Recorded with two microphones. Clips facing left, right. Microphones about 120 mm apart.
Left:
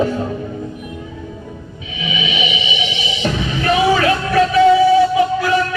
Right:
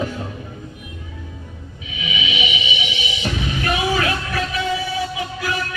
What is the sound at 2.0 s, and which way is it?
Music, 40° left (ahead or behind).